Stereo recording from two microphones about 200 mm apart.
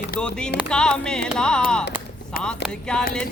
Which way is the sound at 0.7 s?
5° left (ahead or behind).